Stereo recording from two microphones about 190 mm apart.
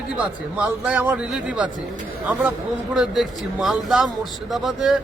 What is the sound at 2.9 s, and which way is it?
A man's voice, centre (ahead or behind).